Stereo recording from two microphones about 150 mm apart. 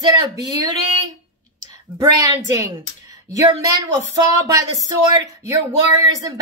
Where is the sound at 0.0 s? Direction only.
25° right (ahead or behind).